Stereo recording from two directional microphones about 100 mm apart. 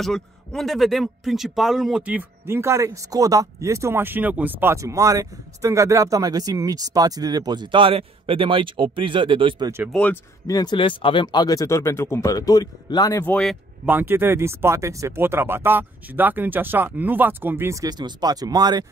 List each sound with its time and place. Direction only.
0.0 s speech: 5° left (ahead or behind)
2.0 s speech: 20° right (ahead or behind)
4.8 s speech: 30° right (ahead or behind); by 9.7 s 55° right (ahead or behind)
10.4 s speech: 40° left (ahead or behind); by 11.4 s 55° left (ahead or behind)
11.4 s speech: 35° left (ahead or behind)
13.8 s speech: 20° right (ahead or behind)
17.8 s speech: 45° right (ahead or behind)